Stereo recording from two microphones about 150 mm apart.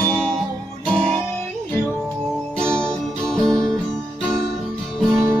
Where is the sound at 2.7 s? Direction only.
5° left (ahead or behind).